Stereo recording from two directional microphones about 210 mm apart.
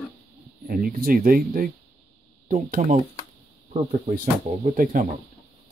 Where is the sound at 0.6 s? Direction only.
45° right (ahead or behind).